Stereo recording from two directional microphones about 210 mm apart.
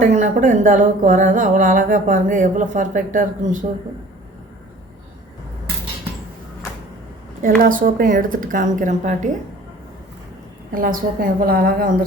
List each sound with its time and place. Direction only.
0.0 s speech: 35° right (ahead or behind)
7.6 s speech: 40° right (ahead or behind)
10.7 s speech: 40° right (ahead or behind)